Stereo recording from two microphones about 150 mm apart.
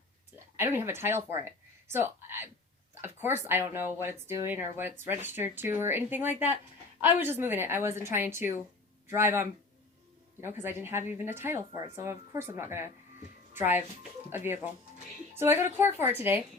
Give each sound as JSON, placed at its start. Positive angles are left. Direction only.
{"t": 0.5, "sound": "speech", "side_deg": -15}